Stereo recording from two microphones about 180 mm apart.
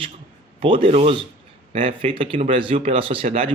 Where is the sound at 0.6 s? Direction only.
30° right (ahead or behind).